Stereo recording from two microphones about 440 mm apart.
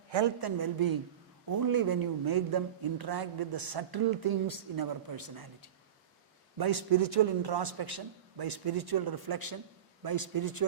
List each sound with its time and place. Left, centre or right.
0.4 s speech: right
6.6 s a man's voice: right